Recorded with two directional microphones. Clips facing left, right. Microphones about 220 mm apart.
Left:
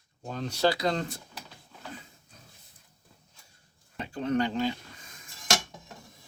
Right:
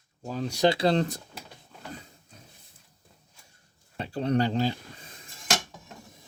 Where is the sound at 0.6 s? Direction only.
25° right (ahead or behind).